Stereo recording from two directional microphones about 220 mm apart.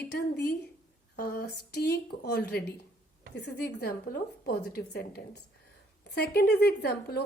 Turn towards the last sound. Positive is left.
turn(degrees=45)  # may be behind; listen again after turning